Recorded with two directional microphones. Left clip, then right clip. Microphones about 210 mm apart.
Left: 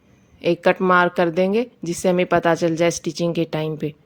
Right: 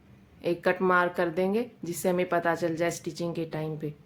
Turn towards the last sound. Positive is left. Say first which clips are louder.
# left 10 dB
turn(degrees=40)  # may be behind; listen again after turning